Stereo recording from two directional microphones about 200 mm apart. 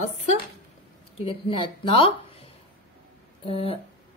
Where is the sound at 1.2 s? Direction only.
25° left (ahead or behind).